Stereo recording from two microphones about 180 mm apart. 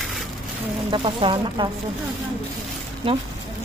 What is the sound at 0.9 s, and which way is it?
Speech, 25° right (ahead or behind).